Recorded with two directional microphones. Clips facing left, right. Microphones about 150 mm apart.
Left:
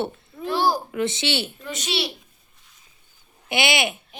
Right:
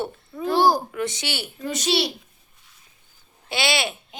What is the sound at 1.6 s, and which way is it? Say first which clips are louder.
Speech: right 6 dB; 40° right (ahead or behind).